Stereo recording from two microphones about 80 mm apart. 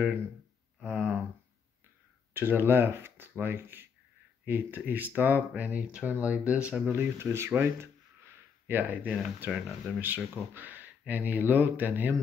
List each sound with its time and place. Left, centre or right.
0.8 s a sound: centre
2.3 s speech: right
6.9 s speech: right